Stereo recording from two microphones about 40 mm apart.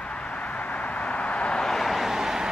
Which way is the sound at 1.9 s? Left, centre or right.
Centre.